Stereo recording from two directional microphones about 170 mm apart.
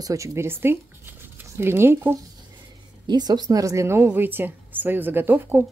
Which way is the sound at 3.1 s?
25° right (ahead or behind).